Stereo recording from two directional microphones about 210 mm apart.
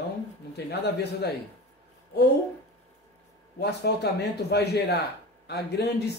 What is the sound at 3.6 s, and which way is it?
Speech, 50° left (ahead or behind).